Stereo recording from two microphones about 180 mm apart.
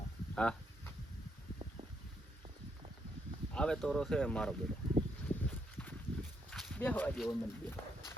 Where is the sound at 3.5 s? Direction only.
5° left (ahead or behind).